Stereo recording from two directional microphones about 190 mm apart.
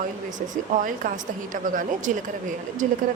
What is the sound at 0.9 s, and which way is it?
Speech, 45° right (ahead or behind).